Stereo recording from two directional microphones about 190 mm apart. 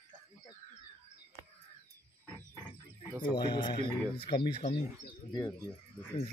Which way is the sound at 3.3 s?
25° left (ahead or behind).